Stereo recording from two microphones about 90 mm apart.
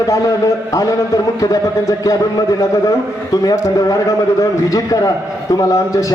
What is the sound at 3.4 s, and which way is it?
A man's voice, 40° left (ahead or behind).